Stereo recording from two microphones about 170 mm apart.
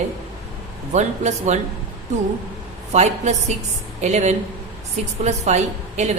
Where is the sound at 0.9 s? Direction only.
40° right (ahead or behind).